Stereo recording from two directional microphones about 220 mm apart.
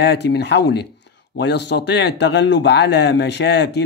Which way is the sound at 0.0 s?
50° left (ahead or behind).